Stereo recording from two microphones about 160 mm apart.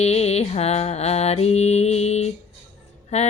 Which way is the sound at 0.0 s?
40° left (ahead or behind).